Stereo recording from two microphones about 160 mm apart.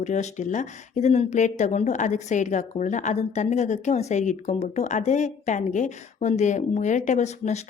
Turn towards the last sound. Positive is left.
turn(degrees=45)  # may be behind; listen again after turning